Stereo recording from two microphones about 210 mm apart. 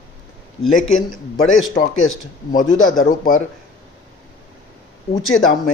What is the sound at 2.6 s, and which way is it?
Speech, 75° left (ahead or behind).